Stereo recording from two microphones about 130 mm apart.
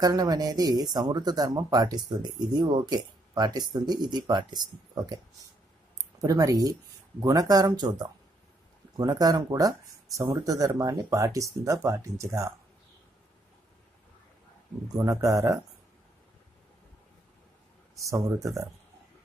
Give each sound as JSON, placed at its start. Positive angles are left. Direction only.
{"t": 0.0, "sound": "speech", "side_deg": -30}
{"t": 6.2, "sound": "speech", "side_deg": -25}
{"t": 14.9, "sound": "speech", "side_deg": -30}
{"t": 17.9, "sound": "speech", "side_deg": -25}